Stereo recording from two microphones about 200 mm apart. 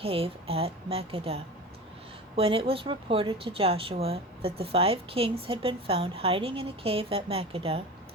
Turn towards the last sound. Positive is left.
turn(degrees=-30)  # may be behind; listen again after turning